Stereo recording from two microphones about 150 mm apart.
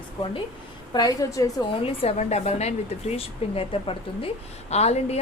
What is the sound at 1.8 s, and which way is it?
A woman's voice, 40° left (ahead or behind).